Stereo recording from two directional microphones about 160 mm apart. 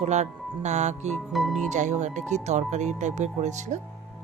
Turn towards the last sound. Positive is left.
turn(degrees=-50)  # may be behind; listen again after turning